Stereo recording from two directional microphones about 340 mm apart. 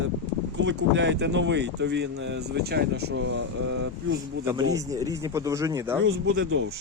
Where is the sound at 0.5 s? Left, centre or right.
Right.